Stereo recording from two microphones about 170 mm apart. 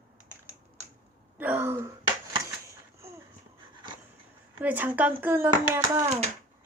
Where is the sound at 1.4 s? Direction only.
10° right (ahead or behind).